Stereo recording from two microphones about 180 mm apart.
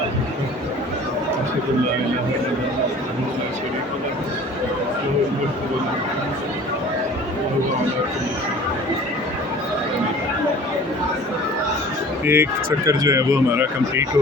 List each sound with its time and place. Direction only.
12.2 s speech: 15° right (ahead or behind)